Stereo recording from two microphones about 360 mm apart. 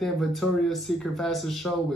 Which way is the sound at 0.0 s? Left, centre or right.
Centre.